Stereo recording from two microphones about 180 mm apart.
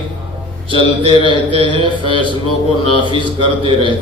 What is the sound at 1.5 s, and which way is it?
A man's voice, 30° right (ahead or behind).